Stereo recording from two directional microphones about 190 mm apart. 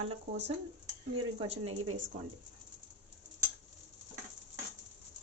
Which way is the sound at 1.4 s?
30° right (ahead or behind).